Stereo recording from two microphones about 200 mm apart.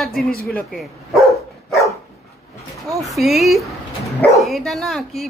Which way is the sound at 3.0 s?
Centre (ahead or behind).